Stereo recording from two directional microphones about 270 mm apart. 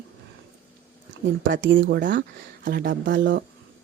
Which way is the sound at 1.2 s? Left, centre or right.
Right.